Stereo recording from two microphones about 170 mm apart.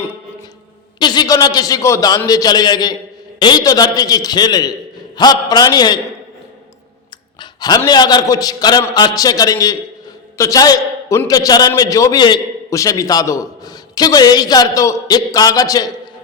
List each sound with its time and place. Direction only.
0.9 s a man's voice: 25° left (ahead or behind)
7.9 s a man's voice: 25° left (ahead or behind)